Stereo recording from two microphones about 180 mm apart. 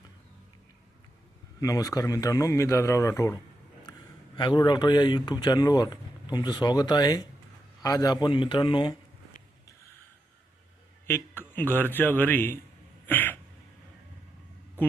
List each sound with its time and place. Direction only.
1.6 s speech: 20° left (ahead or behind)
4.4 s speech: 25° left (ahead or behind)
11.0 s a man's voice: 10° left (ahead or behind)
13.1 s a sound: 10° left (ahead or behind)